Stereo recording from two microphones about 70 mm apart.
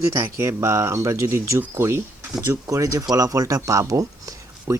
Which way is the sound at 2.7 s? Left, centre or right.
Right.